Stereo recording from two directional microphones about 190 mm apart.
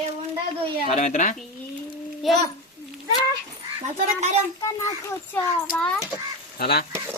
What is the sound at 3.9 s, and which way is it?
Speech, 40° right (ahead or behind).